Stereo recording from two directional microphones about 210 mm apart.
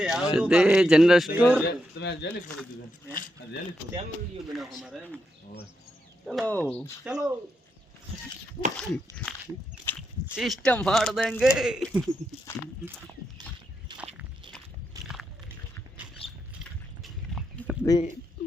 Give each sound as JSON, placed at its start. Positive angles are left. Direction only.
{"t": 0.0, "sound": "speech", "side_deg": -5}
{"t": 1.6, "sound": "speech", "side_deg": 55}
{"t": 4.5, "sound": "speech", "side_deg": 0}
{"t": 6.2, "sound": "speech", "side_deg": 0}
{"t": 7.0, "sound": "speech", "side_deg": -10}
{"t": 8.8, "sound": "speech", "side_deg": 0}
{"t": 9.8, "sound": "a sound", "side_deg": 10}
{"t": 10.3, "sound": "speech", "side_deg": 0}
{"t": 15.0, "sound": "slosh", "side_deg": 0}
{"t": 17.0, "sound": "livestock", "side_deg": 0}